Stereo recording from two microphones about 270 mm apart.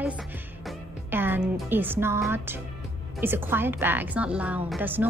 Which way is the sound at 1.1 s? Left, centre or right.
Centre.